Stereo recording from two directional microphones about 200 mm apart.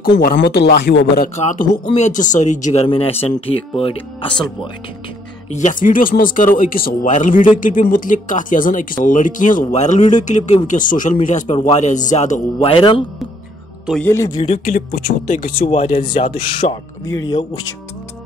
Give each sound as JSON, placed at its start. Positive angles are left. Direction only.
{"t": 0.0, "sound": "speech", "side_deg": 50}
{"t": 1.3, "sound": "speech", "side_deg": 35}
{"t": 5.5, "sound": "speech", "side_deg": 35}
{"t": 14.0, "sound": "a man's voice", "side_deg": 15}
{"t": 14.6, "sound": "speech", "side_deg": 45}